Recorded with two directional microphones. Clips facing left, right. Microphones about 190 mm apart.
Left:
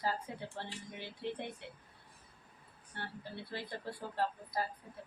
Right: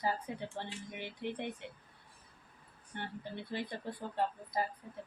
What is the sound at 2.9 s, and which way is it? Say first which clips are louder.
A woman's voice: right 3 dB; 20° right (ahead or behind).